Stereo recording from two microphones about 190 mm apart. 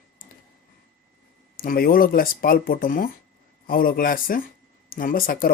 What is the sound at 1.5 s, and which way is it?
Speech, 50° left (ahead or behind).